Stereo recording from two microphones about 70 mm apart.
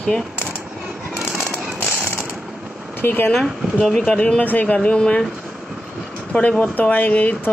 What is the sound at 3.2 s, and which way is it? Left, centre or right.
Speech, centre.